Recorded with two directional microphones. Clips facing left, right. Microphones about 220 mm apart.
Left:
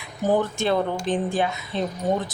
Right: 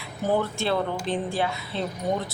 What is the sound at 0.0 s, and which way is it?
Speech, 15° left (ahead or behind).